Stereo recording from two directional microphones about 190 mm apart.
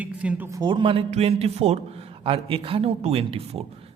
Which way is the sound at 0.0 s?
5° right (ahead or behind).